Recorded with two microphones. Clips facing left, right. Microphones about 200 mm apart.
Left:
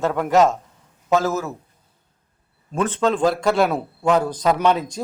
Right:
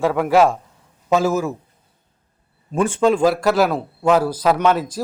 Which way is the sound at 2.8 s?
10° right (ahead or behind).